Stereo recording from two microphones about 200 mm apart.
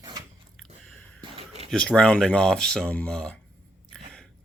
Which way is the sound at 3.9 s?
5° left (ahead or behind).